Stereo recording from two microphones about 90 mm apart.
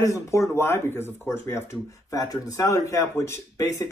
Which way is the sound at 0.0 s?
35° left (ahead or behind).